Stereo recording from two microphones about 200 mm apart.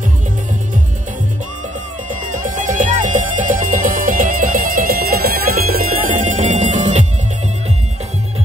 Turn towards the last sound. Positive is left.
turn(degrees=-35)  # may be behind; listen again after turning